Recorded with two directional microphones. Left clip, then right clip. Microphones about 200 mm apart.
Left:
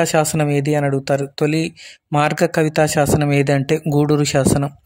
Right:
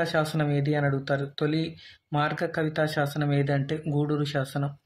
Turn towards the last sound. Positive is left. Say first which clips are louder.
# left 13 dB
turn(degrees=45)  # may be behind; listen again after turning